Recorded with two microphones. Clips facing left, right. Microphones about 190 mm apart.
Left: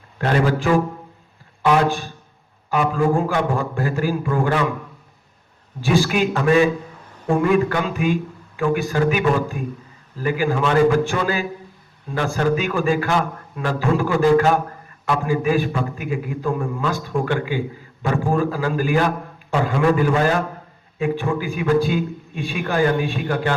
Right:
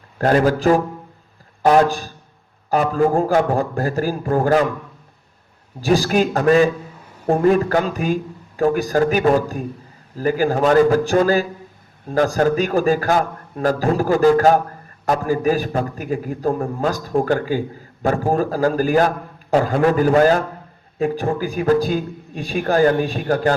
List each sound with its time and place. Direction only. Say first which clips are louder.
0.2 s a man's voice: right 4 dB; 40° right (ahead or behind)
5.8 s a man's voice: right 2 dB; 40° right (ahead or behind)